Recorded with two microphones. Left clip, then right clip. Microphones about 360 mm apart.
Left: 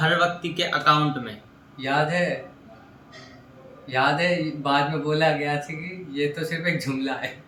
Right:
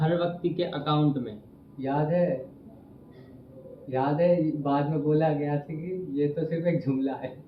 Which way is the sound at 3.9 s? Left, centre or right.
Centre.